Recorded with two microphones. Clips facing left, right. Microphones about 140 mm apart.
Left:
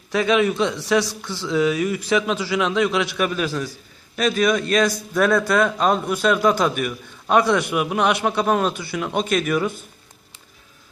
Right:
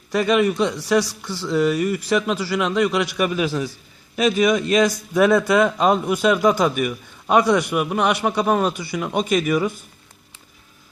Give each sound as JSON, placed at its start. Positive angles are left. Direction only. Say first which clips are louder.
{"t": 0.1, "sound": "a man's voice", "louder": "right 1 dB", "side_deg": -5}